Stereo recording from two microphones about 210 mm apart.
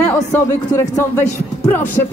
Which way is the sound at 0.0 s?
10° left (ahead or behind).